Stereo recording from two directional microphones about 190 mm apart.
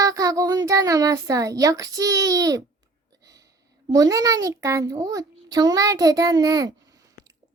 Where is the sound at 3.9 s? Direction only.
20° right (ahead or behind).